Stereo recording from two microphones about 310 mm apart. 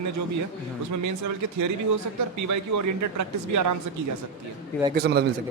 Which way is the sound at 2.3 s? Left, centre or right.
Right.